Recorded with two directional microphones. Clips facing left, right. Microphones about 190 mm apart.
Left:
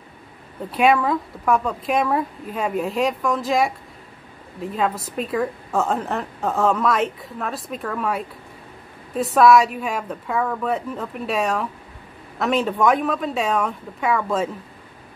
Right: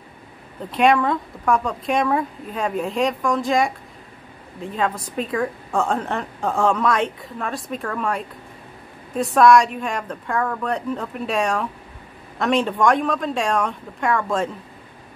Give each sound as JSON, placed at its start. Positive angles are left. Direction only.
{"t": 0.7, "sound": "a woman's voice", "side_deg": 5}